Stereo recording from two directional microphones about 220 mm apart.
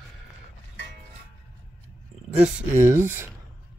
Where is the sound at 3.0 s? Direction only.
10° right (ahead or behind).